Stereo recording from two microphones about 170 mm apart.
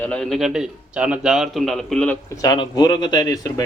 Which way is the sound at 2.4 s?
20° left (ahead or behind).